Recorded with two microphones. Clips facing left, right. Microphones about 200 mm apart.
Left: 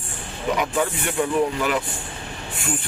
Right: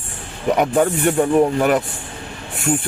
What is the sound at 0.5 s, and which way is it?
A man's voice, 45° right (ahead or behind).